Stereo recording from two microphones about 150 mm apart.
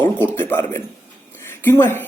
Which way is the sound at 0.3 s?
15° left (ahead or behind).